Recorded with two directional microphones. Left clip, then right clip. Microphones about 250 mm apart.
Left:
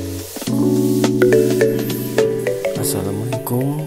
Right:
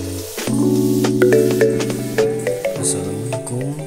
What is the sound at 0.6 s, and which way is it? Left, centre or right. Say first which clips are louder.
Music: left 1 dB; centre.